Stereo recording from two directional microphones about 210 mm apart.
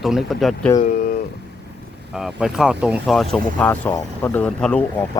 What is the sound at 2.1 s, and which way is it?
Speech, centre (ahead or behind).